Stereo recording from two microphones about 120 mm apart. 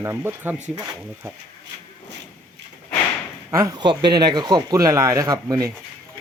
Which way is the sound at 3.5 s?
25° right (ahead or behind).